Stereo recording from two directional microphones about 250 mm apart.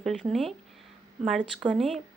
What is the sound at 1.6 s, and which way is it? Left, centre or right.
Speech, centre.